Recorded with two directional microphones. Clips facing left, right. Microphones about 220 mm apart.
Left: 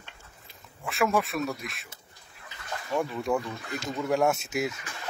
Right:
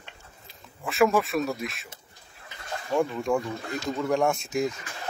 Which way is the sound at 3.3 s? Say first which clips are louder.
Right 2 dB; 5° left (ahead or behind).